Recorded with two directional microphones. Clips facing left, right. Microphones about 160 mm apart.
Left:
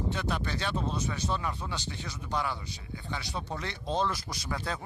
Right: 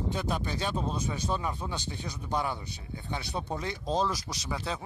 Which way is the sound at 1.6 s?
20° right (ahead or behind).